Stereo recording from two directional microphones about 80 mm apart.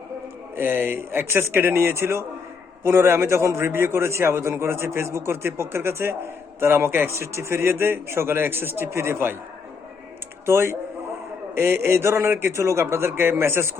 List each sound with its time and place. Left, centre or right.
0.5 s a man's voice: right
10.4 s a man's voice: right